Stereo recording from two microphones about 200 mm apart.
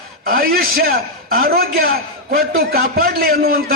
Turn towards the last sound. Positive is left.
turn(degrees=-45)  # may be behind; listen again after turning